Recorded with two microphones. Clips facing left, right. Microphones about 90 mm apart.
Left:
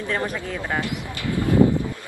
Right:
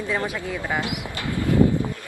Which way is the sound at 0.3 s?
5° right (ahead or behind).